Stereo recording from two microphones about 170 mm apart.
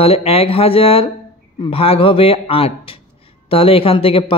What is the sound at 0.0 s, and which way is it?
Speech, 35° left (ahead or behind).